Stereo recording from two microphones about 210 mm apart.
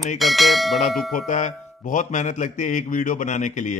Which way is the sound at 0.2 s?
Centre (ahead or behind).